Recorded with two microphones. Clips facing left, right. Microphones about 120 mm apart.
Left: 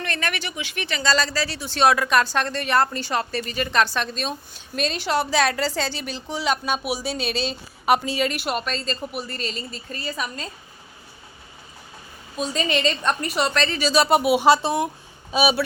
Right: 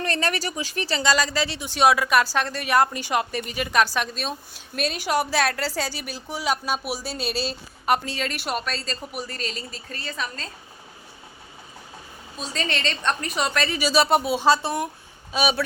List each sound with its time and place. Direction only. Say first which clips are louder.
0.0 s speech: right 3 dB; 30° right (ahead or behind)
1.0 s a woman's voice: left 1 dB; 15° right (ahead or behind); by 10.5 s 10° left (ahead or behind)
12.4 s a woman's voice: left 5 dB; 5° left (ahead or behind)
14.2 s speech: left 3 dB; 15° left (ahead or behind)